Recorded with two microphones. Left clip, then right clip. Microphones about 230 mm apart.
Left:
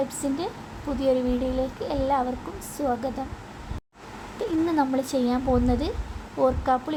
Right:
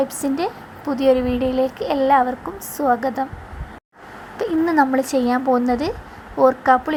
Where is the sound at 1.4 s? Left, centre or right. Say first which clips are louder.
Right 7 dB; right.